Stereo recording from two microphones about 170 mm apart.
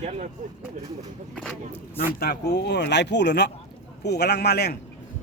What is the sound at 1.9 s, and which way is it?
A man's voice, 65° left (ahead or behind).